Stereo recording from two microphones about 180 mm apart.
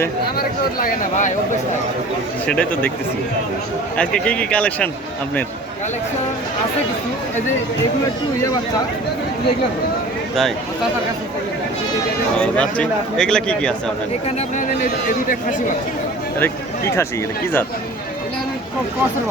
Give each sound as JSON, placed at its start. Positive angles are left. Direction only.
{"t": 0.3, "sound": "a man's voice", "side_deg": 55}
{"t": 2.5, "sound": "speech", "side_deg": 5}
{"t": 3.9, "sound": "speech", "side_deg": 5}
{"t": 12.4, "sound": "speech", "side_deg": 5}
{"t": 14.3, "sound": "a man's voice", "side_deg": 40}
{"t": 16.4, "sound": "speech", "side_deg": 15}